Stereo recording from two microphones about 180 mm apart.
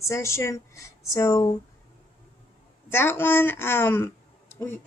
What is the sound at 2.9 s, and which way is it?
A woman's voice, 15° left (ahead or behind).